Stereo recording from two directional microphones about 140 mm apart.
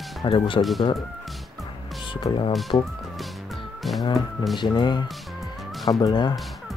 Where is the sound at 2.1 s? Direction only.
35° left (ahead or behind).